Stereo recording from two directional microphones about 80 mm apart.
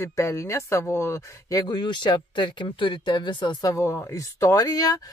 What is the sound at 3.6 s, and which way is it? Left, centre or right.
Speech, left.